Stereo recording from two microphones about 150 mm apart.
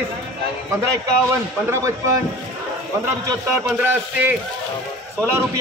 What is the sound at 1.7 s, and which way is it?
Speech, 20° right (ahead or behind).